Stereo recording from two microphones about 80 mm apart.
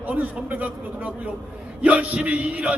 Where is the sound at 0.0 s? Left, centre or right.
Right.